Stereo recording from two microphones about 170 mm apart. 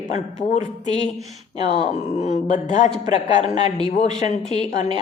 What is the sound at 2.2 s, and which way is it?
A woman's voice, 45° left (ahead or behind).